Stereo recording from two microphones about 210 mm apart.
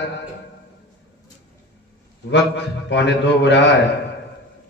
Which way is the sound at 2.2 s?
55° left (ahead or behind).